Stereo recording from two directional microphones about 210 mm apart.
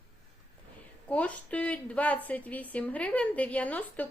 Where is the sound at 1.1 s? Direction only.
5° left (ahead or behind).